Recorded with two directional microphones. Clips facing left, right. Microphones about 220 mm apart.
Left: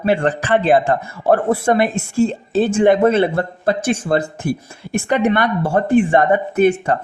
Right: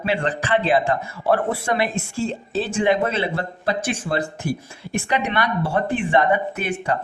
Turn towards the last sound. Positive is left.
turn(degrees=50)  # may be behind; listen again after turning